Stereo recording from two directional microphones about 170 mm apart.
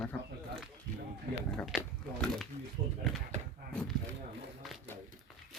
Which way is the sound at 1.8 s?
5° left (ahead or behind).